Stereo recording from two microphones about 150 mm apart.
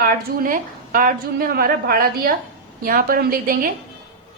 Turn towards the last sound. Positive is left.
turn(degrees=-75)  # may be behind; listen again after turning